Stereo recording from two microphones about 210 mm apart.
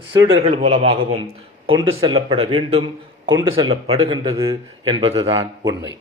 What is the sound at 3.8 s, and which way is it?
Speech, 25° right (ahead or behind).